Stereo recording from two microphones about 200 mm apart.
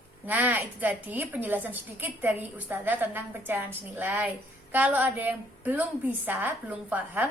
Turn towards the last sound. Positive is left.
turn(degrees=-10)  # may be behind; listen again after turning